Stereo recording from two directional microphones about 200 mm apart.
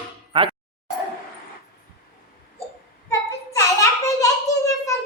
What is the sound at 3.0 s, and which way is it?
Child singing, 15° left (ahead or behind).